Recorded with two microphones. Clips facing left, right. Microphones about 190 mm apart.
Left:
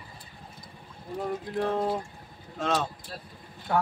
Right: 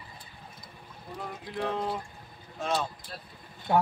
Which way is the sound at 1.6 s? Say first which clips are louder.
Left 3 dB; 45° left (ahead or behind).